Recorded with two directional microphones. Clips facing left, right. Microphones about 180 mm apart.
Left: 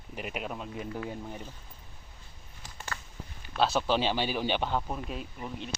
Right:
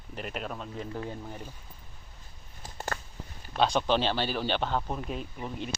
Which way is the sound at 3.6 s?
5° left (ahead or behind).